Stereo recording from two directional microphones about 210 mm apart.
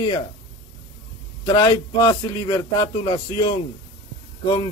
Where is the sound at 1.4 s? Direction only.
15° left (ahead or behind).